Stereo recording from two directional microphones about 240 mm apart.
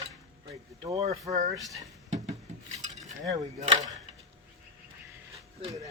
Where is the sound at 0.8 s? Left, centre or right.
Right.